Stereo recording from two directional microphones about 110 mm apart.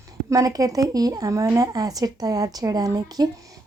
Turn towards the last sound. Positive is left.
turn(degrees=-35)  # may be behind; listen again after turning